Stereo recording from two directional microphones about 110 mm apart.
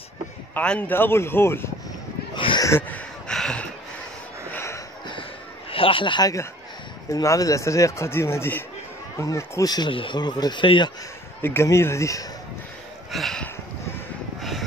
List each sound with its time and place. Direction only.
0.6 s speech: 15° left (ahead or behind)
2.3 s a sound: 45° left (ahead or behind)
2.9 s a sound: 5° left (ahead or behind)
4.5 s a sound: 25° left (ahead or behind)
5.7 s a man's voice: 55° left (ahead or behind)
7.1 s speech: 30° left (ahead or behind)
9.8 s speech: 50° left (ahead or behind)
11.4 s speech: 25° left (ahead or behind)
13.1 s speech: centre (ahead or behind)